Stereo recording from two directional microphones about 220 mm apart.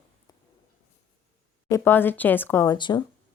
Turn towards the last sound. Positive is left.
turn(degrees=20)  # may be behind; listen again after turning